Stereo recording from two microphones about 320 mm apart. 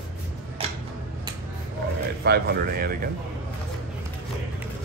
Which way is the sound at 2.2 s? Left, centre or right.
Right.